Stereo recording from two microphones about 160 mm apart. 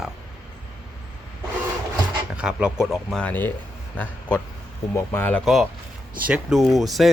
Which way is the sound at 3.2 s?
10° left (ahead or behind).